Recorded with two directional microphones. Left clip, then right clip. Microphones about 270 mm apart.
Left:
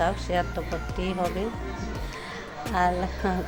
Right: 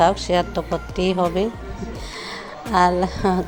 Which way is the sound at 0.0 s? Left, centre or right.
Right.